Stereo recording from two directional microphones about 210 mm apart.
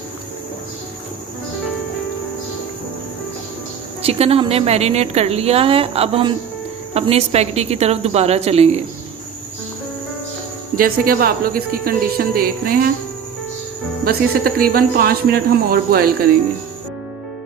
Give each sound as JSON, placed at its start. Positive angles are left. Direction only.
{"t": 4.0, "sound": "a woman's voice", "side_deg": -30}
{"t": 10.8, "sound": "speech", "side_deg": -45}
{"t": 14.0, "sound": "speech", "side_deg": -45}